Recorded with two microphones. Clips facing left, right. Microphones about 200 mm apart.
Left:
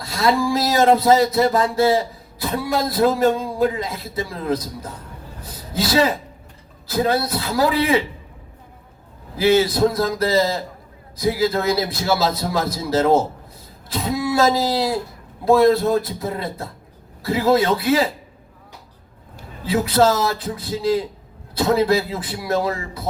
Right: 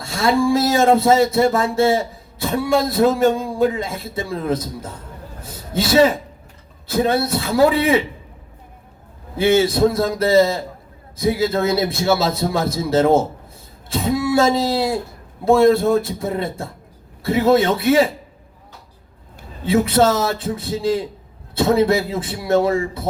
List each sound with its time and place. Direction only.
0.0 s a man's voice: 25° right (ahead or behind)
5.4 s a sound: 25° right (ahead or behind)
6.8 s a man's voice: 25° right (ahead or behind)
9.3 s a man's voice: 25° right (ahead or behind)
19.6 s a man's voice: 25° right (ahead or behind)